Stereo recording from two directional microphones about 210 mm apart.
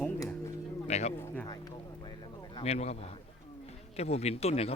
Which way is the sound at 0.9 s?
30° left (ahead or behind).